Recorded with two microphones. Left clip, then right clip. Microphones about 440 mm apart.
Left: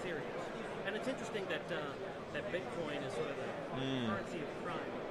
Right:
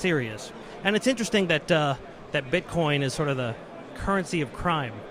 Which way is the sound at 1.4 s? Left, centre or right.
Right.